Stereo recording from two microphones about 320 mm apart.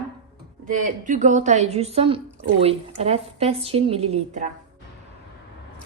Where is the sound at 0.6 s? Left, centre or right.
Right.